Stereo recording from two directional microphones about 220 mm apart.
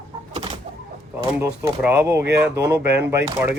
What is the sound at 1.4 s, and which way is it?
Speech, 10° right (ahead or behind).